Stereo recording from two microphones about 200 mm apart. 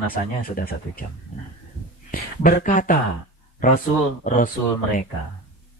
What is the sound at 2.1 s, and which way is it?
A man's voice, 45° left (ahead or behind).